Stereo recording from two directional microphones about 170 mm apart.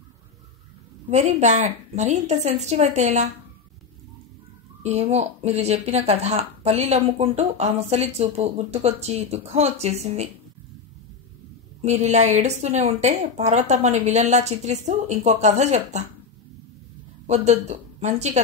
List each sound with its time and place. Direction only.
1.1 s a woman's voice: 40° right (ahead or behind)
4.8 s speech: 40° right (ahead or behind)
11.8 s a woman's voice: 40° right (ahead or behind)
17.3 s a woman's voice: 40° right (ahead or behind)